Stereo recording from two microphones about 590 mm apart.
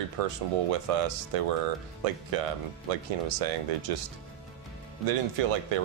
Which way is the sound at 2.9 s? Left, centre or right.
Right.